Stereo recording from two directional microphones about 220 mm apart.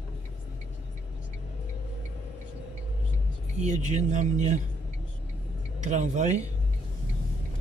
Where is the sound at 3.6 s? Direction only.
30° right (ahead or behind).